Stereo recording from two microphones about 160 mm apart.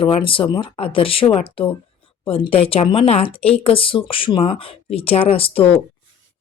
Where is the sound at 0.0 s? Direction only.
35° left (ahead or behind).